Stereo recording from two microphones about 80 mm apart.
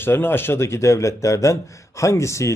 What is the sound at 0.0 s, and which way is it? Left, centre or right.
Speech, left.